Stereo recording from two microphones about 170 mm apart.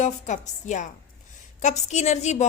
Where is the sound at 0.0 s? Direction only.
45° left (ahead or behind).